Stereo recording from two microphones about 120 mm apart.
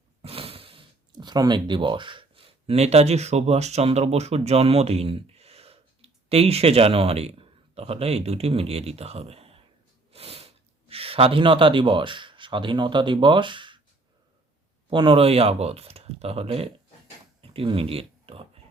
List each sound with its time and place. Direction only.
0.2 s speech: 55° right (ahead or behind)
14.8 s speech: 45° right (ahead or behind)
17.4 s a sound: 50° right (ahead or behind)